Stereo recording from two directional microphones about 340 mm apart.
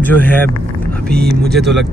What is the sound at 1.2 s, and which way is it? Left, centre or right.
Speech, right.